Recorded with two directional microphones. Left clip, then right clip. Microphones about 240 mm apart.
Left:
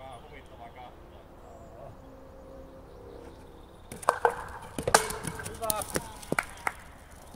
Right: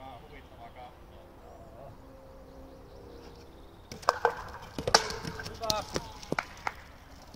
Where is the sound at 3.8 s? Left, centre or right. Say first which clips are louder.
Left 2 dB; right.